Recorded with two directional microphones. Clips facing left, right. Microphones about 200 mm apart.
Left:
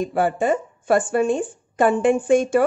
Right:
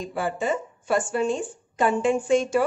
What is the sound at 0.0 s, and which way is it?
A woman's voice, 55° left (ahead or behind).